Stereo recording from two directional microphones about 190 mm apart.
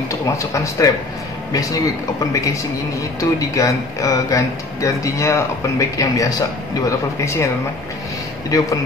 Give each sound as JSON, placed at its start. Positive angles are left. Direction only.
{"t": 0.1, "sound": "speech", "side_deg": 15}